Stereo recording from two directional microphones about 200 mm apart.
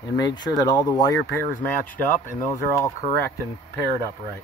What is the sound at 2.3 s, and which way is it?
Speech, 10° left (ahead or behind).